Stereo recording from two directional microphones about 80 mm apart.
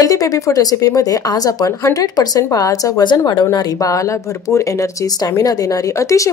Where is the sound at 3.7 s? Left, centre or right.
Left.